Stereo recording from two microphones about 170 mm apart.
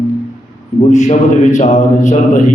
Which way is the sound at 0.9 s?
45° left (ahead or behind).